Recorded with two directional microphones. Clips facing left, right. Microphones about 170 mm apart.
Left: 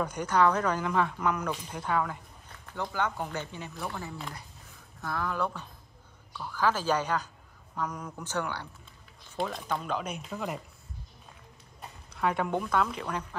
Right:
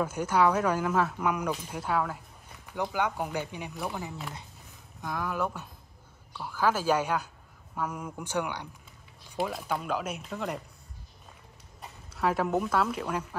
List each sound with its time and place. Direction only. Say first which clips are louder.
0.0 s speech: even; 5° right (ahead or behind)
12.1 s speech: right 2 dB; centre (ahead or behind)